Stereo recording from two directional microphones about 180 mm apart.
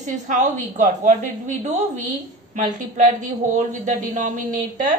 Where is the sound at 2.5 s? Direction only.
45° right (ahead or behind).